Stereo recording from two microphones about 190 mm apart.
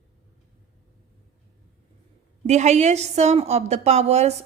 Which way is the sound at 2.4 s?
35° right (ahead or behind).